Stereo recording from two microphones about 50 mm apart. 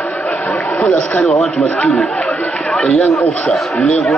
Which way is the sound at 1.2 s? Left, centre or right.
Centre.